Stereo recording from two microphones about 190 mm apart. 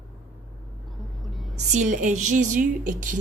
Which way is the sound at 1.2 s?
Centre (ahead or behind).